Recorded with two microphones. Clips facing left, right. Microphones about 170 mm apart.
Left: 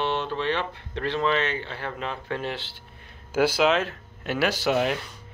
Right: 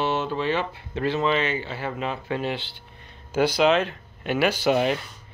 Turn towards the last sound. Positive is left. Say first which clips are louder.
# right 2 dB
turn(degrees=0)  # may be behind; listen again after turning